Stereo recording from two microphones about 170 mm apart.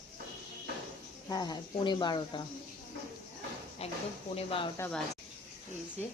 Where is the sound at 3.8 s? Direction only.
35° left (ahead or behind).